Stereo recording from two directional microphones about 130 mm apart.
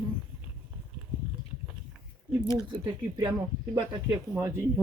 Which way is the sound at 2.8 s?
30° right (ahead or behind).